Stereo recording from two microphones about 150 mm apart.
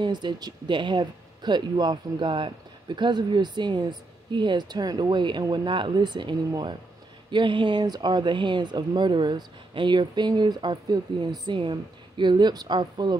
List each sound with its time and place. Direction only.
0.0 s speech: 30° right (ahead or behind)